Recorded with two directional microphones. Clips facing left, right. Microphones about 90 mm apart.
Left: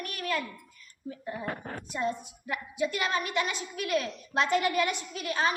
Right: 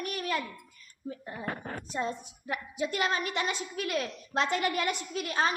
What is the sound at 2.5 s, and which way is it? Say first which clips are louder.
A woman's voice: left 2 dB; 35° right (ahead or behind).